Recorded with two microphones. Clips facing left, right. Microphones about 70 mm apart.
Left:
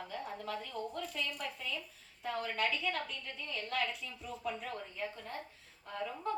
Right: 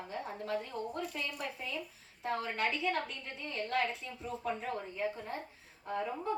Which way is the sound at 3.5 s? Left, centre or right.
Right.